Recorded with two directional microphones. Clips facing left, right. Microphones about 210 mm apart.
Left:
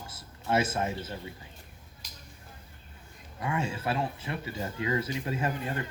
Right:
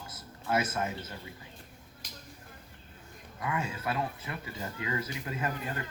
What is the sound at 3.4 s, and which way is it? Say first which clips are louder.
Speech: left 3 dB; 30° left (ahead or behind).